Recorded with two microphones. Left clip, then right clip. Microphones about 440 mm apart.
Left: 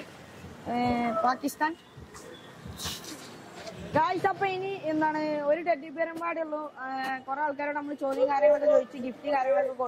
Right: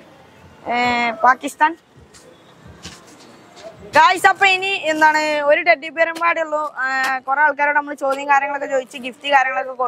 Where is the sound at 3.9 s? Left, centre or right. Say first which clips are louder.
Right 14 dB; centre.